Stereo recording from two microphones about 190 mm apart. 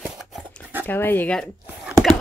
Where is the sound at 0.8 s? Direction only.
10° left (ahead or behind).